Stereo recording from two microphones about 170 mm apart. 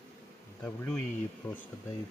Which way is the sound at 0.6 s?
10° left (ahead or behind).